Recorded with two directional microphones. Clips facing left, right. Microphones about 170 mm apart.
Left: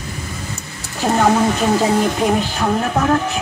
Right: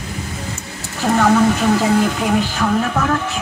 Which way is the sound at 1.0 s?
20° left (ahead or behind).